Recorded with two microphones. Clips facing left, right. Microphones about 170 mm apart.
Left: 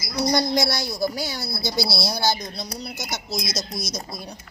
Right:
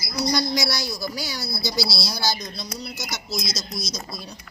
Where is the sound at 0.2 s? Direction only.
55° left (ahead or behind).